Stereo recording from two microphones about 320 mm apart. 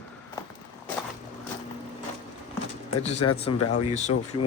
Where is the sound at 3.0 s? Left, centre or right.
Centre.